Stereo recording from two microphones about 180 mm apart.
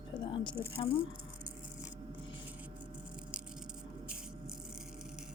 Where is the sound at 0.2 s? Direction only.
25° left (ahead or behind).